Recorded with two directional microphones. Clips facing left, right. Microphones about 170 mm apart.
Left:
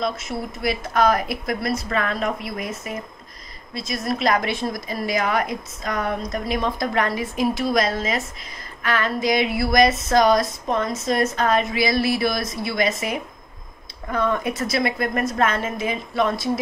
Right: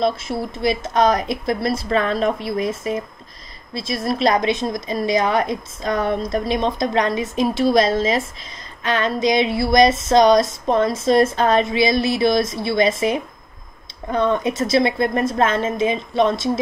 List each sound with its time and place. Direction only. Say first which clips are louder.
0.0 s a woman's voice: right 5 dB; 30° right (ahead or behind)
3.7 s a woman's voice: right 3 dB; 30° right (ahead or behind)